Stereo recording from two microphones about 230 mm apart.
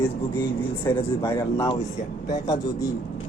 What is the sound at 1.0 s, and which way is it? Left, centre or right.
A man's voice, centre.